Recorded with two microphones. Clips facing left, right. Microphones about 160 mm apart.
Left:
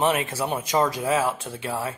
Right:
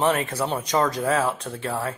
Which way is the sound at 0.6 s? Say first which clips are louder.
Even; 5° left (ahead or behind).